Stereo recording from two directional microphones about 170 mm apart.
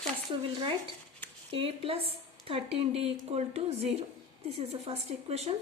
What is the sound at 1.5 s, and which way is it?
Speech, 35° right (ahead or behind).